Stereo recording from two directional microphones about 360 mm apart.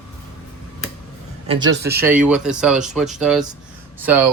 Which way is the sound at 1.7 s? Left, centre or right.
Right.